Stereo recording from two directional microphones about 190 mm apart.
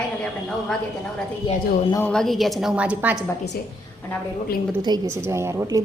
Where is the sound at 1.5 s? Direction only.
25° left (ahead or behind).